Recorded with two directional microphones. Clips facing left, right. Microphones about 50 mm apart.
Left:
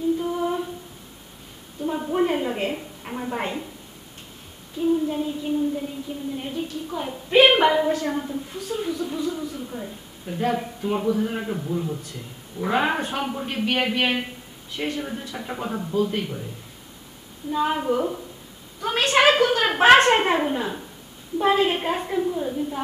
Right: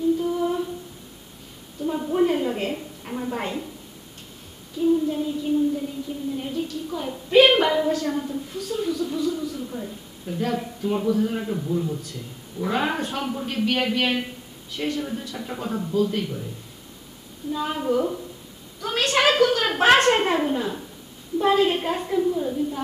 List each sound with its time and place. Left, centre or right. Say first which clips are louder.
0.2 s humming: right 1 dB; centre
1.9 s a sound: right 1 dB; centre
4.7 s child singing: right 1 dB; centre
6.3 s a woman's voice: right 1 dB; left
17.5 s a woman's voice: left 2 dB; left